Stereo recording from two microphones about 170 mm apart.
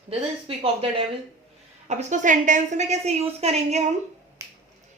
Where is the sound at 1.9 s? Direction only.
45° right (ahead or behind).